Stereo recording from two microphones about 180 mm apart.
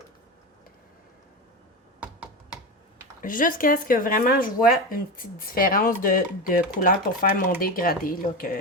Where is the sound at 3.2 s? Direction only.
50° left (ahead or behind).